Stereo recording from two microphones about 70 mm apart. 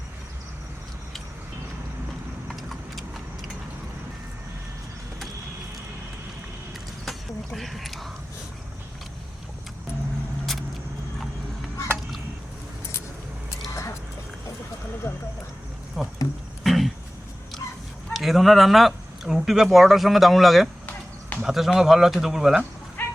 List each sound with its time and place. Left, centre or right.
2.5 s vehicle: centre
7.0 s speech: centre
13.7 s dog: left
15.1 s a sound: left
16.0 s a sound: centre
18.1 s speech: centre
23.0 s dog: left